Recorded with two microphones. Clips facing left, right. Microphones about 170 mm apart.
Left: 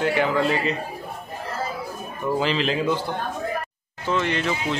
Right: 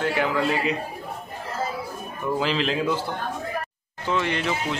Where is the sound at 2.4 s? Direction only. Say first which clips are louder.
Left 1 dB; centre (ahead or behind).